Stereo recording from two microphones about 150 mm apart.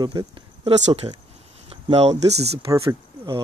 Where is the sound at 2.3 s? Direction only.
90° right.